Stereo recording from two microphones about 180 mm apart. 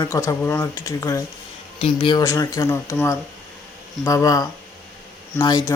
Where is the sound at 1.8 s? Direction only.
30° left (ahead or behind).